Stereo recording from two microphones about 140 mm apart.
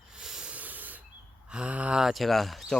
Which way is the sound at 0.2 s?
5° right (ahead or behind).